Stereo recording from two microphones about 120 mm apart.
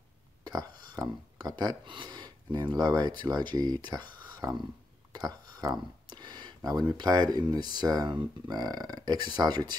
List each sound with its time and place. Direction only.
0.4 s speech: 35° right (ahead or behind)